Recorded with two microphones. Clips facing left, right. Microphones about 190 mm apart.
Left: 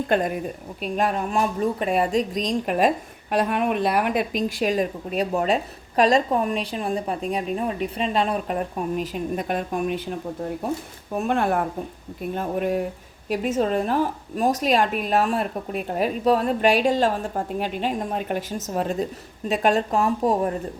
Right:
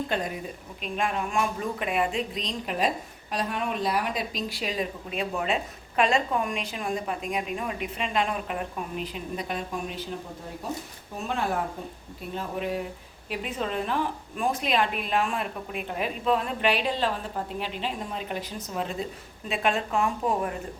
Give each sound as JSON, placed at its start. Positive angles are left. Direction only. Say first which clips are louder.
{"t": 0.1, "sound": "a woman's voice", "louder": "left 8 dB", "side_deg": 55}
{"t": 0.8, "sound": "a woman's voice", "louder": "left 5 dB", "side_deg": 40}